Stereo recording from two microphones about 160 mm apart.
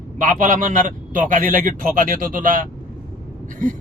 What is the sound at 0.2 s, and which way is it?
Speech, 55° right (ahead or behind).